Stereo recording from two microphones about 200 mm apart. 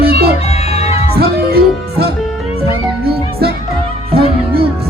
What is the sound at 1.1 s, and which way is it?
Music, 50° right (ahead or behind).